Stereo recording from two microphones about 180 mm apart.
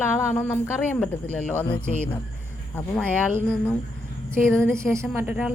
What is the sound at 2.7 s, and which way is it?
Speech, 5° left (ahead or behind).